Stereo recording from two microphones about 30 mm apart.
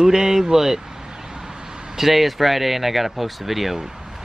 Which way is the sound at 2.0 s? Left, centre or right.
Centre.